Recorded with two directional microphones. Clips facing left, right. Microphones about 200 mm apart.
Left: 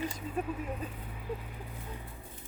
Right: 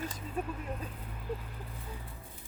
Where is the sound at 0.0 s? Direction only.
10° left (ahead or behind).